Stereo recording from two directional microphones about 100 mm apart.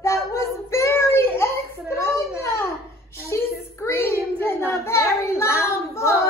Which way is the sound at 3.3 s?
25° left (ahead or behind).